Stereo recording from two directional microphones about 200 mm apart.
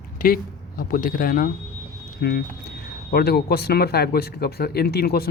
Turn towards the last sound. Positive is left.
turn(degrees=50)  # may be behind; listen again after turning